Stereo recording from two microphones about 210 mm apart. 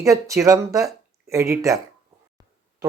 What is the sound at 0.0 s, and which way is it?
Speech, 15° right (ahead or behind).